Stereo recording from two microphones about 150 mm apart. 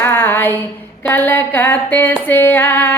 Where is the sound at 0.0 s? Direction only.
15° left (ahead or behind).